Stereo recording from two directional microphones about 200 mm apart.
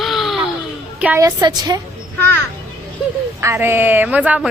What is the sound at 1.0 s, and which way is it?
Speech, 10° right (ahead or behind).